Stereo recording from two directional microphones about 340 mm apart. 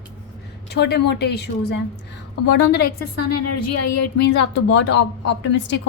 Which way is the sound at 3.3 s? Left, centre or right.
Left.